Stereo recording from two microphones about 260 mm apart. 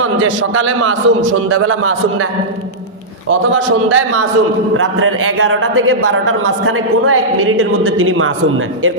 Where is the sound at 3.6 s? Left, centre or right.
Right.